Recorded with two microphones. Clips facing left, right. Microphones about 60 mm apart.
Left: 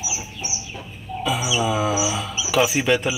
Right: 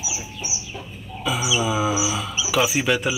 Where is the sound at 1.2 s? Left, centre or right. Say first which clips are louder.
Left 1 dB; centre.